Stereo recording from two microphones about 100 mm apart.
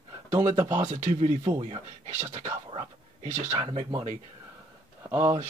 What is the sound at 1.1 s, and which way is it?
Speech, 90° right.